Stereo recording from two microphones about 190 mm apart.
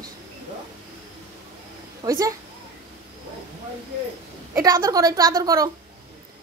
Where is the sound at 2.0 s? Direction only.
15° right (ahead or behind).